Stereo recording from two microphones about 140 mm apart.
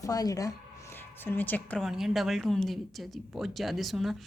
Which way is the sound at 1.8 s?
Centre (ahead or behind).